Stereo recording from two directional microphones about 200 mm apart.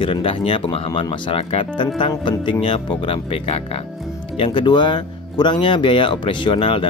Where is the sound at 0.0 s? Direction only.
25° left (ahead or behind).